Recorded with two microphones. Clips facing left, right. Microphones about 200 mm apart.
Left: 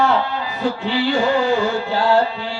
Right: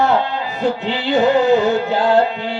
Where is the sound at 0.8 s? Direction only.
20° right (ahead or behind).